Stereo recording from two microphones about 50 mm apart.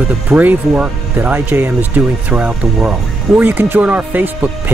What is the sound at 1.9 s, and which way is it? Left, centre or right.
Speech, right.